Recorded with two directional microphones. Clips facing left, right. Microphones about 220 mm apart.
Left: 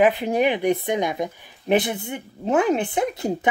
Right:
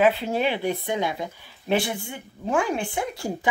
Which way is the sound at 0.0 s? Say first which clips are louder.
Left 3 dB; 15° left (ahead or behind).